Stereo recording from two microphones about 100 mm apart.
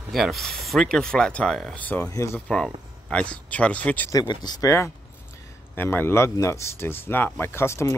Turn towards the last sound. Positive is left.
turn(degrees=25)  # may be behind; listen again after turning